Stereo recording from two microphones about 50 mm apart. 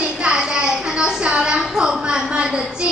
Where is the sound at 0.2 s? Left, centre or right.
Centre.